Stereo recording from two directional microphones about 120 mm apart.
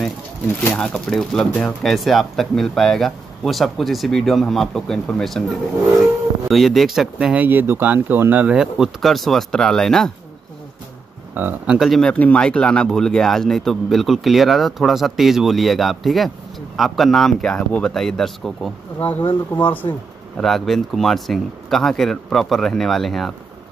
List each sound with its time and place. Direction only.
0.7 s speech: 10° left (ahead or behind)
6.5 s speech: centre (ahead or behind)
7.4 s speech: 15° right (ahead or behind)
8.5 s speech: 5° right (ahead or behind)
11.3 s speech: 15° right (ahead or behind)
11.9 s speech: 10° left (ahead or behind)
18.9 s speech: 15° left (ahead or behind)
20.3 s speech: 5° left (ahead or behind)